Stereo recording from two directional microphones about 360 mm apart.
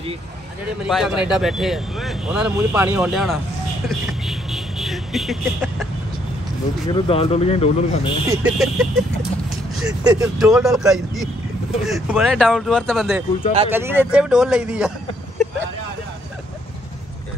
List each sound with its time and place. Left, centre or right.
0.8 s speech: centre
3.9 s vehicle: centre
6.9 s speech: centre
8.3 s speech: centre